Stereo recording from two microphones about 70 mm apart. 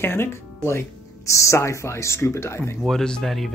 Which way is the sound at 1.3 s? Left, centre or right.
Left.